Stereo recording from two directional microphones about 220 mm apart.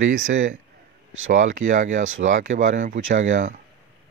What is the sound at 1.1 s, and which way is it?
Speech, 60° right (ahead or behind).